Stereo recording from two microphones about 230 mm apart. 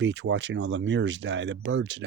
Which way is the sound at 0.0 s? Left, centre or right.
Right.